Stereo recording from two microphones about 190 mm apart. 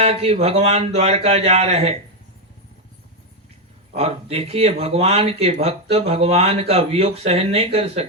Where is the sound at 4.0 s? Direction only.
30° right (ahead or behind).